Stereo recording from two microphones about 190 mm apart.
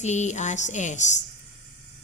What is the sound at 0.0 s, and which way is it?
A woman's voice, 40° left (ahead or behind).